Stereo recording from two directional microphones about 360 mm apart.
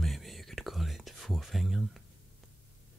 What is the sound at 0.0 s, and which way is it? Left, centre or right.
Whispering, centre.